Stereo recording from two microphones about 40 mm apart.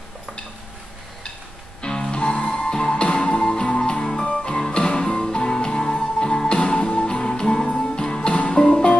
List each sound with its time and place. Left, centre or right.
1.8 s music: centre